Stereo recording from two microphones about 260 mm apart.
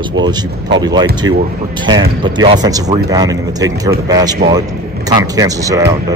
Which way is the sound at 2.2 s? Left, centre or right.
Centre.